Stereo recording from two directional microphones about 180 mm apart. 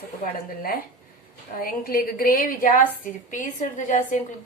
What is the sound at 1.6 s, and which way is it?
A woman's voice, 55° left (ahead or behind).